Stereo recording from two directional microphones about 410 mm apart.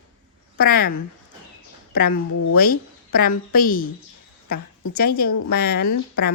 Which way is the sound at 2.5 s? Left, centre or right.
Left.